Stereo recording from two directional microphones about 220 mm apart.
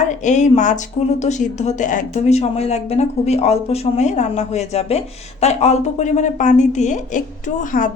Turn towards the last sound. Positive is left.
turn(degrees=35)  # may be behind; listen again after turning